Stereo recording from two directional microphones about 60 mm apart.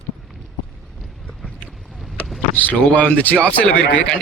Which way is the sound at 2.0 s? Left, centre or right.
Centre.